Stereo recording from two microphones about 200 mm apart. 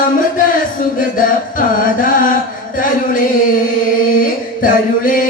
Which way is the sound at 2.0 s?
45° left (ahead or behind).